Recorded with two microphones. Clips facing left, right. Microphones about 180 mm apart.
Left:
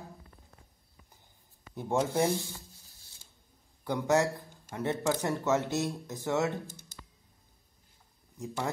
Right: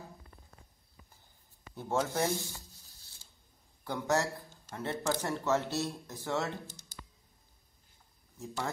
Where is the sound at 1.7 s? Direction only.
15° left (ahead or behind).